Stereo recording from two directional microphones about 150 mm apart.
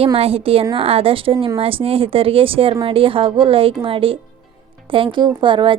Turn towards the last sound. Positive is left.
turn(degrees=-35)  # may be behind; listen again after turning